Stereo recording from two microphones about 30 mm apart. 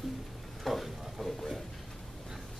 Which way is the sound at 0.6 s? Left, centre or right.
Centre.